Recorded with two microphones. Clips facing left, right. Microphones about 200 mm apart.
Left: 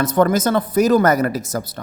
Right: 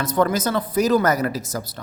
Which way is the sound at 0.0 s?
50° left (ahead or behind).